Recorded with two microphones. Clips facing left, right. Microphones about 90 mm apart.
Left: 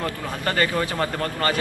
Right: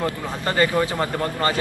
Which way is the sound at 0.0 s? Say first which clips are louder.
Right 2 dB; 20° right (ahead or behind).